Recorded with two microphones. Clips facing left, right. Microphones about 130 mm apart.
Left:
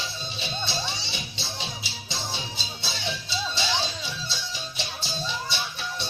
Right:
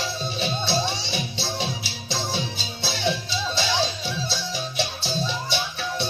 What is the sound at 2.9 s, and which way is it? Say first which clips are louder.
Music: right 8 dB; 60° right (ahead or behind).